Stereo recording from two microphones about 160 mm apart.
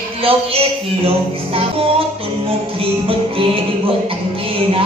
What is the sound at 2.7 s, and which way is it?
Music, 35° right (ahead or behind).